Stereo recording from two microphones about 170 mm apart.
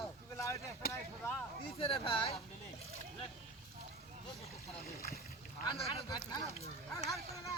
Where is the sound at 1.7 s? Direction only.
35° left (ahead or behind).